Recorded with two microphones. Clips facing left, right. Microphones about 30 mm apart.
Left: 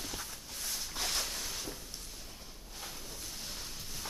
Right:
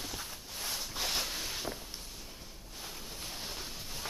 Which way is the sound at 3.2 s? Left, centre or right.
Right.